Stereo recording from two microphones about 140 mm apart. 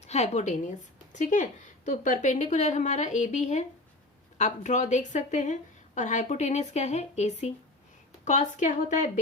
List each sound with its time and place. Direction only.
0.0 s a woman's voice: 55° left (ahead or behind)